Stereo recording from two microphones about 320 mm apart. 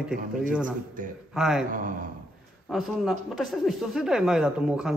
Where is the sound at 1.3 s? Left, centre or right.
Centre.